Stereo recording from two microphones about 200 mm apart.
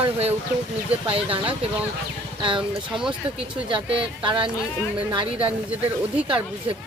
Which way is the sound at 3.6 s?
25° right (ahead or behind).